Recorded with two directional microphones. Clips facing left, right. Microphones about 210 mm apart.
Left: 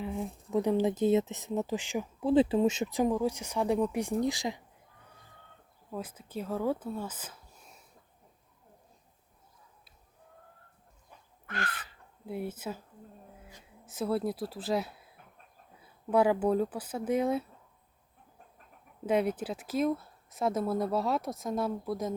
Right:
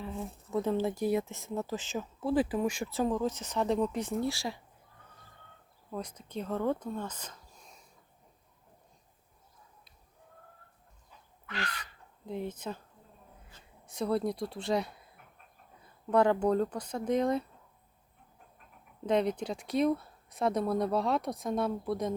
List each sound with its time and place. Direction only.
0.0 s speech: 15° left (ahead or behind)
5.9 s speech: 5° left (ahead or behind)
11.1 s chicken: 55° left (ahead or behind)
11.4 s bird: 50° left (ahead or behind)
11.8 s speech: 5° left (ahead or behind)
19.0 s speech: 5° left (ahead or behind)